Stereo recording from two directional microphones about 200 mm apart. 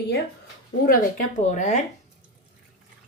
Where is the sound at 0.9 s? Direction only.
40° left (ahead or behind).